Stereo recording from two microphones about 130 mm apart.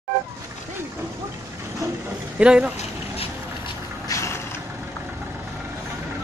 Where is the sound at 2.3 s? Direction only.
5° right (ahead or behind).